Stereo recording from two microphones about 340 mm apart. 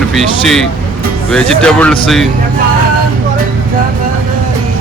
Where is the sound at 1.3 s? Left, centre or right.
Centre.